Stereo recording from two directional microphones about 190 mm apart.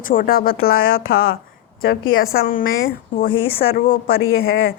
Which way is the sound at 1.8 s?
75° left (ahead or behind).